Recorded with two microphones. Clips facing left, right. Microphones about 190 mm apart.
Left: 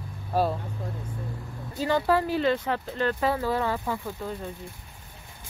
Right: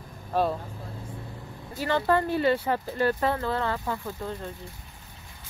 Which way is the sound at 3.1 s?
5° left (ahead or behind).